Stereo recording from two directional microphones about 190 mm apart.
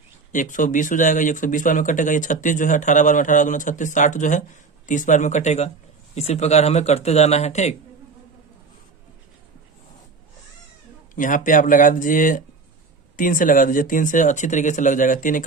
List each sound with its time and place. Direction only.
0.3 s speech: 45° left (ahead or behind)
11.1 s speech: 45° left (ahead or behind)